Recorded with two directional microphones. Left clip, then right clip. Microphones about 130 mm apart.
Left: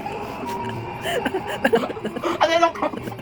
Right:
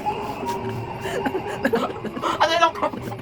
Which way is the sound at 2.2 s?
10° right (ahead or behind).